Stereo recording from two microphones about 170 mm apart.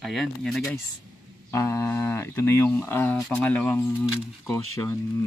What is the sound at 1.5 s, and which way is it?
Speech, 15° left (ahead or behind).